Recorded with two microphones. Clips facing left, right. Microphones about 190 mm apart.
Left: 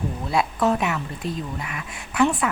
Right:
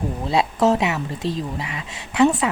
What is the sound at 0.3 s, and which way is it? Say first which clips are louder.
Speech: right 3 dB; 25° right (ahead or behind).